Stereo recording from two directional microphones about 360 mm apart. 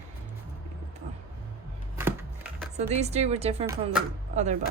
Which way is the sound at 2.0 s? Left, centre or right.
Centre.